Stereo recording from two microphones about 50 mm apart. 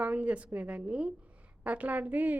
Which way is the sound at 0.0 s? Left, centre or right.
Right.